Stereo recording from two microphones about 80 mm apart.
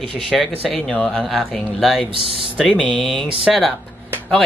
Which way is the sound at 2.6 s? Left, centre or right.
Centre.